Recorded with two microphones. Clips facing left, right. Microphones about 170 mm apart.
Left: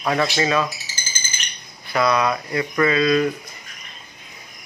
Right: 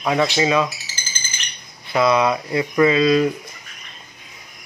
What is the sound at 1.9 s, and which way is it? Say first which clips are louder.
Speech: right 2 dB; 20° right (ahead or behind).